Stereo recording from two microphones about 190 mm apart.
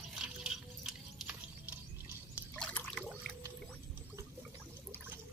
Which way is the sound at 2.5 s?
5° left (ahead or behind).